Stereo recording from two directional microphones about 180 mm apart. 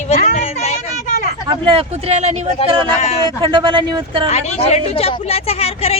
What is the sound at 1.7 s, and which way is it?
Speech, 35° right (ahead or behind).